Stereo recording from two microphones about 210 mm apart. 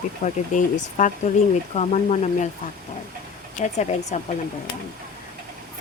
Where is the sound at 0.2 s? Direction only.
35° left (ahead or behind).